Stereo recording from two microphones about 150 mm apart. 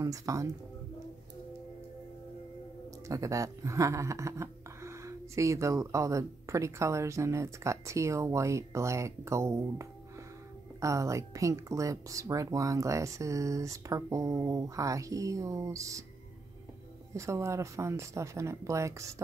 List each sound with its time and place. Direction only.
0.0 s speech: 20° right (ahead or behind)
3.1 s speech: 20° right (ahead or behind)
17.1 s speech: 20° right (ahead or behind)